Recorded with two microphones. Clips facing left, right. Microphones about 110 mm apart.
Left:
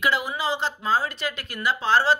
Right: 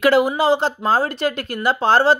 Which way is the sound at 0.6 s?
60° right (ahead or behind).